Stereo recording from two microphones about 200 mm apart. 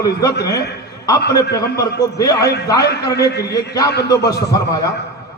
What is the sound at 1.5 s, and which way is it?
Speech, 15° left (ahead or behind).